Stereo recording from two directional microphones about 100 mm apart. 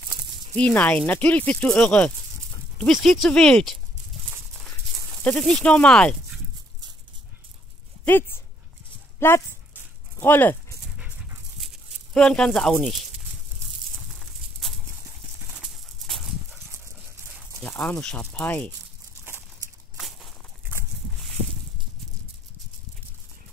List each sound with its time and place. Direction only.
0.6 s speech: 15° left (ahead or behind)
2.9 s speech: centre (ahead or behind)
5.4 s speech: 10° left (ahead or behind)
8.0 s speech: 20° left (ahead or behind)
11.6 s a sound: 5° left (ahead or behind)
15.6 s dog: centre (ahead or behind)
17.6 s speech: 15° left (ahead or behind)